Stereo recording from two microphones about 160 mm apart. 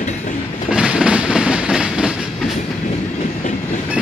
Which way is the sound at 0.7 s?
5° right (ahead or behind).